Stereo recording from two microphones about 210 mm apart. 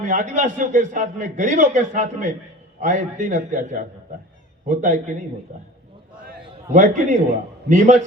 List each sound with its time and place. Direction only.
0.0 s a man's voice: 35° right (ahead or behind)
6.7 s a man's voice: 40° right (ahead or behind)